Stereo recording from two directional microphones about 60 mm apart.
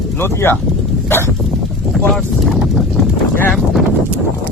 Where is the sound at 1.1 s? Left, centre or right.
Left.